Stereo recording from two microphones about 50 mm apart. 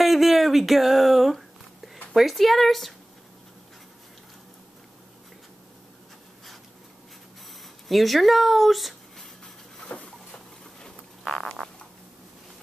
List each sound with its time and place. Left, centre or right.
0.0 s music: centre
2.1 s speech: centre
7.9 s speech: centre
10.0 s a sound: centre
11.2 s speech: centre